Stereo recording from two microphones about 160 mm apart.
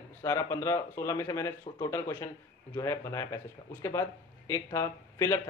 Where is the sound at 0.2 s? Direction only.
20° left (ahead or behind).